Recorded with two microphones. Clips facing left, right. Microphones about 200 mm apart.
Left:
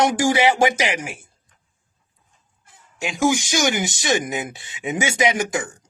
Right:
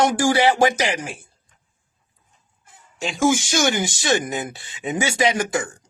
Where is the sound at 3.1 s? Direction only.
15° left (ahead or behind).